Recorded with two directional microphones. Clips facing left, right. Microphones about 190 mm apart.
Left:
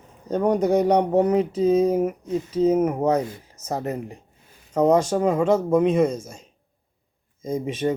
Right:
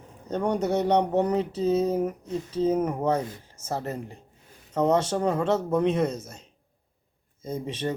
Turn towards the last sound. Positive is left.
turn(degrees=10)  # may be behind; listen again after turning